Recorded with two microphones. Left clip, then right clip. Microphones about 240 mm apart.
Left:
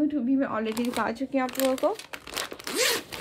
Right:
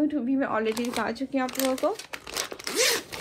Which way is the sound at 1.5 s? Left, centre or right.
Centre.